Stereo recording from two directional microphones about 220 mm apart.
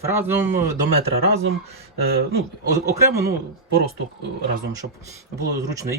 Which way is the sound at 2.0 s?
45° right (ahead or behind).